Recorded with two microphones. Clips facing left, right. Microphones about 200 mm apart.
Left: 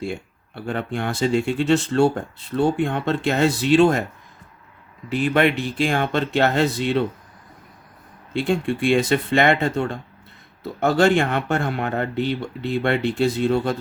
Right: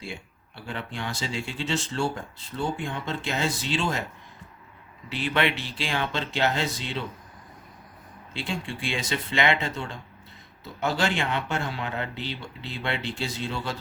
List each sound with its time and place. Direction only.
0.0 s speech: 55° left (ahead or behind)
5.0 s speech: 45° left (ahead or behind)
8.3 s speech: 55° left (ahead or behind)